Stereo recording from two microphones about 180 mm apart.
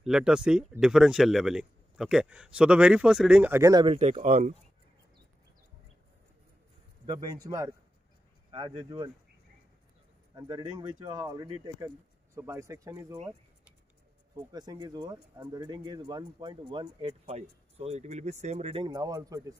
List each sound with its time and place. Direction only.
0.0 s speech: 5° right (ahead or behind); by 4.0 s 25° right (ahead or behind)
4.0 s speech: 40° right (ahead or behind)
7.4 s speech: 20° right (ahead or behind)
10.3 s speech: 25° right (ahead or behind)
14.3 s speech: 25° right (ahead or behind)